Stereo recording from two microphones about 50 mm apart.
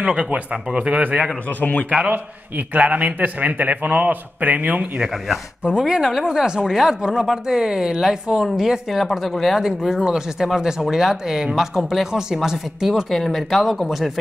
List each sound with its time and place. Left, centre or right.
0.0 s speech: right
1.6 s a man's voice: left
2.0 s a man's voice: right
5.8 s speech: centre
13.1 s speech: centre